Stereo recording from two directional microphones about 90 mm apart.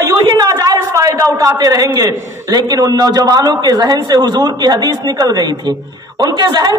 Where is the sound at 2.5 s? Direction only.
45° right (ahead or behind).